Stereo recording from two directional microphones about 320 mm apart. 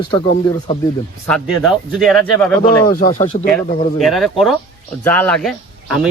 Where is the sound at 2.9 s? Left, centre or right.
Left.